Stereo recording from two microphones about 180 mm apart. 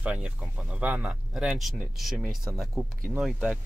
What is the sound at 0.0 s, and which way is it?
Speech, 5° right (ahead or behind).